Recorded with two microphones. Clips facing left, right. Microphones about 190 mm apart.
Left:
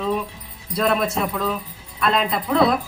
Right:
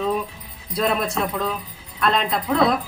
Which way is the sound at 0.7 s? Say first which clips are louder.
Left 1 dB; centre (ahead or behind).